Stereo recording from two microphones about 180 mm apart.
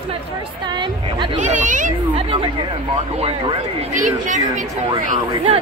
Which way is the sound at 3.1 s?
35° right (ahead or behind).